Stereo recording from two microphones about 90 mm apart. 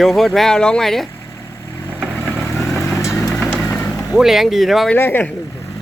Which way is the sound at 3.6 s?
10° left (ahead or behind).